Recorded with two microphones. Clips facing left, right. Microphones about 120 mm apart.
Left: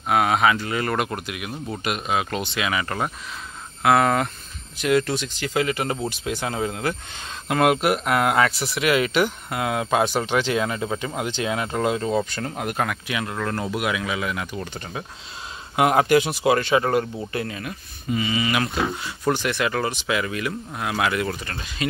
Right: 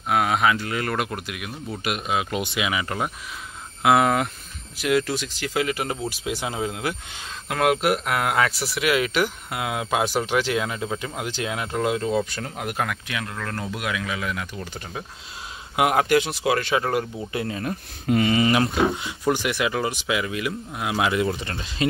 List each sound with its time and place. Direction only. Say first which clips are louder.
0.1 s speech: left 2 dB; centre (ahead or behind)
17.3 s speech: right 2 dB; 25° right (ahead or behind)
18.0 s speech: right 4 dB; 60° right (ahead or behind)
18.4 s speech: right 4 dB; 30° right (ahead or behind)
19.2 s speech: even; 10° right (ahead or behind)
20.9 s speech: right 2 dB; 20° right (ahead or behind)